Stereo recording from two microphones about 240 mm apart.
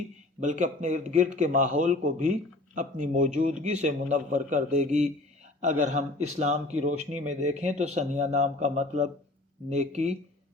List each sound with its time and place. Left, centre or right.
0.3 s a man's voice: right